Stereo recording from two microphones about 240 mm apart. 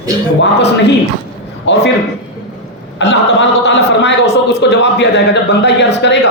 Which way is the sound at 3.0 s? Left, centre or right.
Left.